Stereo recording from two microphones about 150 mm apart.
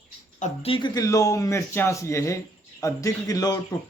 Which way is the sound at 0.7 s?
30° left (ahead or behind).